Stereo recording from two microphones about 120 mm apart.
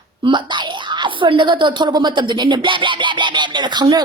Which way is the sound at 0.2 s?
40° right (ahead or behind).